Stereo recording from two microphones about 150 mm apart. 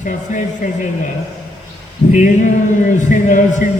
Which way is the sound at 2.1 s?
55° left (ahead or behind).